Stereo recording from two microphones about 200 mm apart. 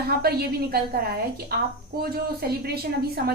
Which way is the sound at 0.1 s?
50° right (ahead or behind).